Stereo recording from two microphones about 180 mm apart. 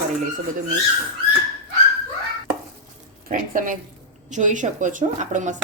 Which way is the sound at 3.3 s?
50° right (ahead or behind).